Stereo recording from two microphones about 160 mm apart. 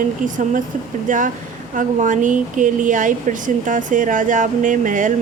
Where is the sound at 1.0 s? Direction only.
55° right (ahead or behind).